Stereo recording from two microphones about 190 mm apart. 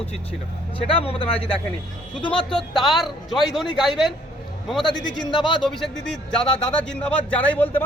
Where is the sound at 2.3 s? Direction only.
Centre (ahead or behind).